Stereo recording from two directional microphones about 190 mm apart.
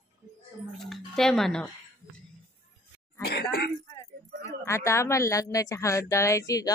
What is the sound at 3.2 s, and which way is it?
Speech, 55° left (ahead or behind).